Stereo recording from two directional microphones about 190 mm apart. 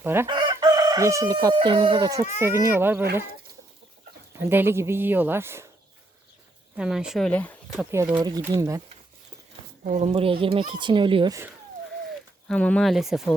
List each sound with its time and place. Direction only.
0.0 s chicken: 10° right (ahead or behind)
0.3 s chicken: 25° right (ahead or behind)
1.5 s speech: 25° right (ahead or behind)
4.4 s speech: 10° right (ahead or behind)
6.7 s speech: 5° right (ahead or behind)
7.9 s speech: 10° right (ahead or behind)
9.8 s speech: 40° right (ahead or behind)
12.5 s speech: 5° left (ahead or behind)